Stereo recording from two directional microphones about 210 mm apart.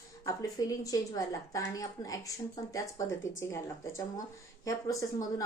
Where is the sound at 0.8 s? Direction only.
15° left (ahead or behind).